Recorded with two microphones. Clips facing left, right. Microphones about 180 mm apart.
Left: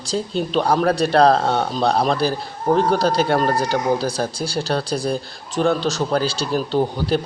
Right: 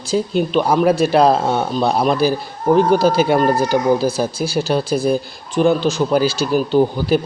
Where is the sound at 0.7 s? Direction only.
5° right (ahead or behind).